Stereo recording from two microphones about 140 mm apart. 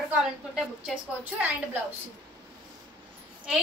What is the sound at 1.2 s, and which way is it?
Speech, 10° right (ahead or behind).